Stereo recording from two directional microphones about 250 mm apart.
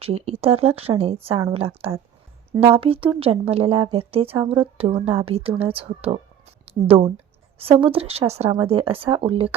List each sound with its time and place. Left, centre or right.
0.0 s a woman's voice: right